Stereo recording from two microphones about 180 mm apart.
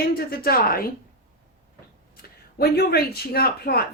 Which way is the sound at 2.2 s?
60° left (ahead or behind).